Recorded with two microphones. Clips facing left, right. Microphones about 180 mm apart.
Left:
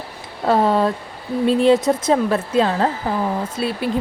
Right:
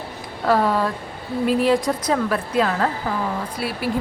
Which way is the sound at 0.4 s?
25° left (ahead or behind).